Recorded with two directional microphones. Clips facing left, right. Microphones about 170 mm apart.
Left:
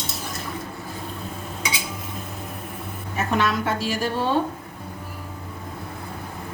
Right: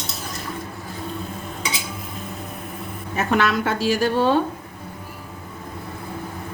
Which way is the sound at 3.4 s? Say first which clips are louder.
Right 2 dB; 70° right (ahead or behind).